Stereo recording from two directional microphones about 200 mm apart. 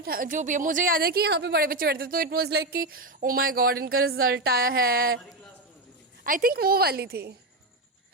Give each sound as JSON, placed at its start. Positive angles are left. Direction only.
{"t": 0.0, "sound": "a woman's voice", "side_deg": -45}
{"t": 6.2, "sound": "a woman's voice", "side_deg": -45}